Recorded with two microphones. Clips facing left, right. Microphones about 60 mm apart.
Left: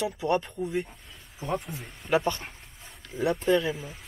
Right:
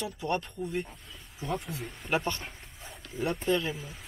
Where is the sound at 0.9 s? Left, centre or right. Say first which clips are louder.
Right 1 dB; centre.